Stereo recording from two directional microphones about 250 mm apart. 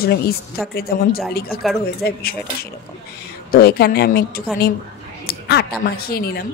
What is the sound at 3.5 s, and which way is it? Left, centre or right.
Speech, left.